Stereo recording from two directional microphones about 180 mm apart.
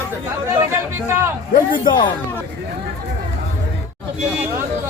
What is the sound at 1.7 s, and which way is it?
Speech, 25° left (ahead or behind).